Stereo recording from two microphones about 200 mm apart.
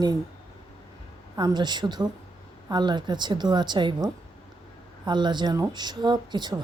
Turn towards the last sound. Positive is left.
turn(degrees=-20)  # may be behind; listen again after turning